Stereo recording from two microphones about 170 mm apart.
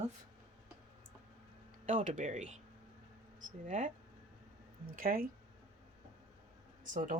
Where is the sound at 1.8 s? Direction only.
50° right (ahead or behind).